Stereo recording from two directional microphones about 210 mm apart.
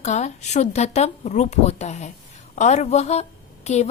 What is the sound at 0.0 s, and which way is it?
A woman's voice, 35° left (ahead or behind).